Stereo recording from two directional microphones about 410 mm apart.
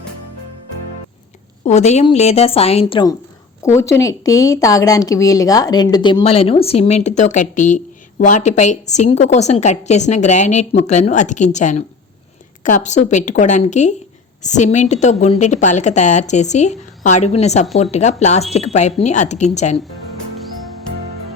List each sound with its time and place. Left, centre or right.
1.6 s a woman's voice: centre